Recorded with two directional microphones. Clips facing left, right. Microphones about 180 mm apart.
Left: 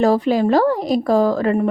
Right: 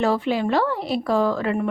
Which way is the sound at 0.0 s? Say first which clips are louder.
Left 6 dB; 40° left (ahead or behind).